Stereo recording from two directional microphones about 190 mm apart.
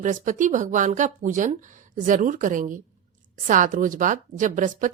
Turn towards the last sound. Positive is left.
turn(degrees=-45)  # may be behind; listen again after turning